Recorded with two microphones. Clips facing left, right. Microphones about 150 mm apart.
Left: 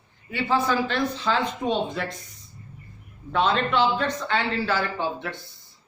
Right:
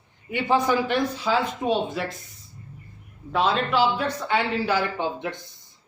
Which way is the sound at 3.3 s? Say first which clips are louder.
Even; 5° right (ahead or behind).